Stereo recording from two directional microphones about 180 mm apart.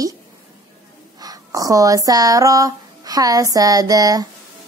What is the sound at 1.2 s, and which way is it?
Speech, 20° right (ahead or behind).